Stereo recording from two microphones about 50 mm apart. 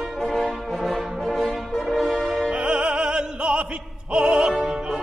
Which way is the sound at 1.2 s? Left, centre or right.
Centre.